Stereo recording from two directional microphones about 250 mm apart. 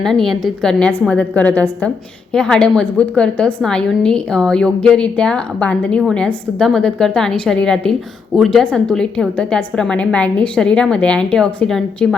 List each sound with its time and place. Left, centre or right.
0.0 s a woman's voice: centre